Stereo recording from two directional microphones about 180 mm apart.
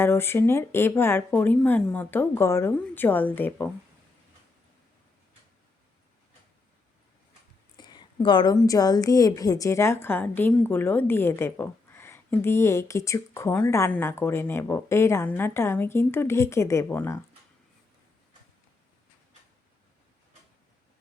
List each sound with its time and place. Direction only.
0.0 s a woman's voice: 15° left (ahead or behind)
7.8 s a sound: 25° left (ahead or behind)
8.5 s a woman's voice: 20° left (ahead or behind)